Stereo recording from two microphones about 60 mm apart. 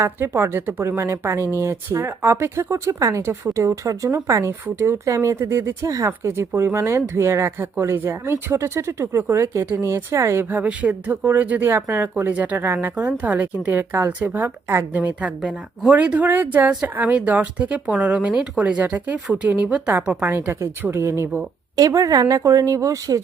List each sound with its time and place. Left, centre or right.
0.0 s speech: right
5.1 s speech: right
5.4 s speech: right
6.2 s speech: right
10.5 s speech: right
11.7 s speech: right
12.6 s speech: right
14.1 s speech: right
20.3 s speech: right
21.8 s speech: right
22.4 s speech: right